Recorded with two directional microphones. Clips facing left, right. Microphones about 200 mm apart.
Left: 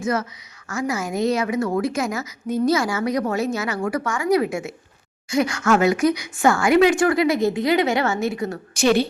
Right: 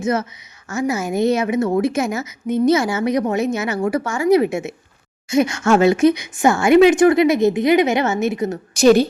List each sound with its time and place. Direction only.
0.0 s a woman's voice: 25° right (ahead or behind)
8.7 s a woman's voice: 40° right (ahead or behind)